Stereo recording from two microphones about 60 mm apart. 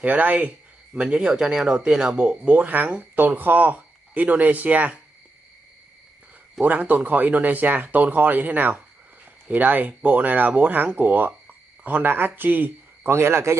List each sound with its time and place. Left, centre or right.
0.0 s speech: right
6.6 s speech: right